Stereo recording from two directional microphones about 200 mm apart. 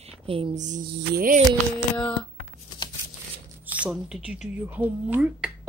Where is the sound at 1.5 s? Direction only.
5° left (ahead or behind).